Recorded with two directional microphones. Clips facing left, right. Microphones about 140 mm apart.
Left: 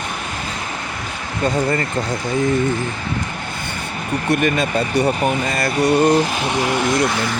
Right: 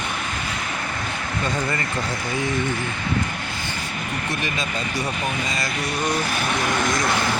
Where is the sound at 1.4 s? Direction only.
35° left (ahead or behind).